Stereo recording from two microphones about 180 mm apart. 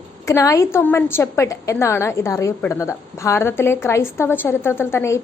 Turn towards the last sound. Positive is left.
turn(degrees=15)  # may be behind; listen again after turning